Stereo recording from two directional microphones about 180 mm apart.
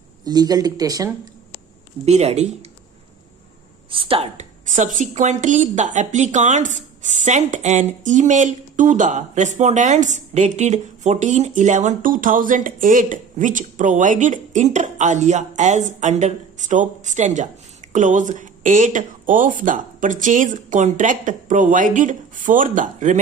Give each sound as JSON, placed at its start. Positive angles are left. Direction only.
{"t": 0.3, "sound": "speech", "side_deg": -20}
{"t": 2.0, "sound": "a woman's voice", "side_deg": -35}
{"t": 3.8, "sound": "a woman's voice", "side_deg": -30}